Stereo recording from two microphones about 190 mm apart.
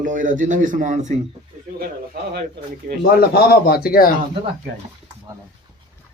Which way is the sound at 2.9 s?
50° right (ahead or behind).